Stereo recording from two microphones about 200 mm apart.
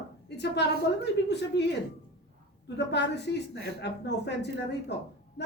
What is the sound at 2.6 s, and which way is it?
A woman's voice, 60° left (ahead or behind).